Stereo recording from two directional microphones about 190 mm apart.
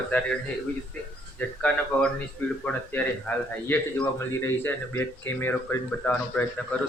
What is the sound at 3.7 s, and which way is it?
Speech, 10° left (ahead or behind).